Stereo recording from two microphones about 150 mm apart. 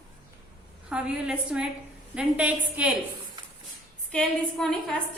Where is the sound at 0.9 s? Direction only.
5° right (ahead or behind).